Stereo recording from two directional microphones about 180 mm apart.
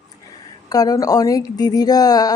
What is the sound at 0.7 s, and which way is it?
Speech, 20° left (ahead or behind).